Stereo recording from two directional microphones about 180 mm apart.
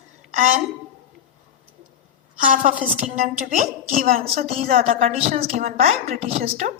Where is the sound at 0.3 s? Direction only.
45° right (ahead or behind).